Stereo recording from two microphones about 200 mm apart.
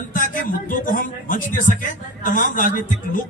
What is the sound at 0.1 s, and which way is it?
A man's voice, 40° left (ahead or behind).